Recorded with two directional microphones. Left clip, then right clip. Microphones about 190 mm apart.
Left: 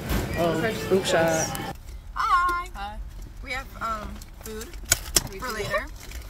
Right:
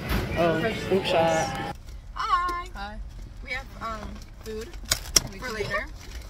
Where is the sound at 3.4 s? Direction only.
Centre (ahead or behind).